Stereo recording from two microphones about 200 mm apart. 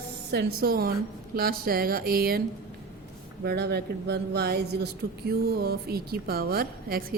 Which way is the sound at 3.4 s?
55° right (ahead or behind).